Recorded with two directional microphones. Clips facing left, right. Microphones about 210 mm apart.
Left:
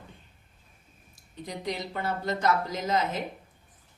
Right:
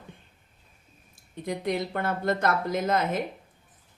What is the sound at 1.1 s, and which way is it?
Speech, 55° right (ahead or behind).